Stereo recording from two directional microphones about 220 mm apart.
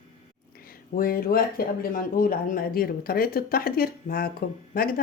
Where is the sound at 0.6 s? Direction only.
40° left (ahead or behind).